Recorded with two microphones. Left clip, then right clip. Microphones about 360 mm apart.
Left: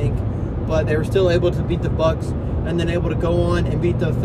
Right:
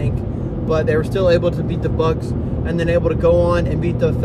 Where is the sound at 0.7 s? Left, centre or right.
Right.